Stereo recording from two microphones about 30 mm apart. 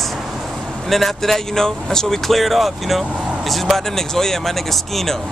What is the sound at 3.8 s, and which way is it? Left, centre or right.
A man's voice, centre.